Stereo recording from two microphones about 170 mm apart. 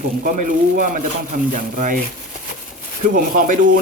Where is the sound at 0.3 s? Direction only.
50° right (ahead or behind).